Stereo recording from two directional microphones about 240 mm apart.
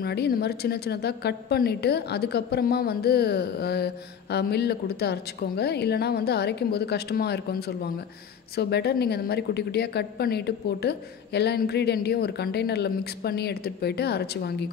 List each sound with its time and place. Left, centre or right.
0.0 s a woman's voice: left